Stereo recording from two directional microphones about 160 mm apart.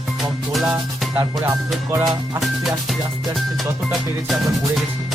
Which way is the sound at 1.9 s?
20° right (ahead or behind).